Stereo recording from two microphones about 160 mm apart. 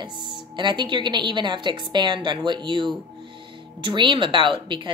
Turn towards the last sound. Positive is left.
turn(degrees=-30)  # may be behind; listen again after turning